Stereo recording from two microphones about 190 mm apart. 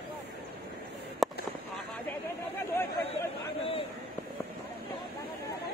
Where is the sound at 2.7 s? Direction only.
10° left (ahead or behind).